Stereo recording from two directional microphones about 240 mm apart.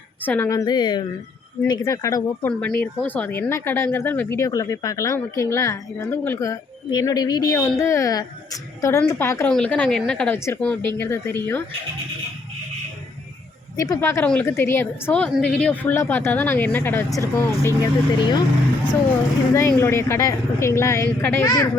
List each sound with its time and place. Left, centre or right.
0.3 s speech: centre
13.7 s speech: centre
19.5 s speech: centre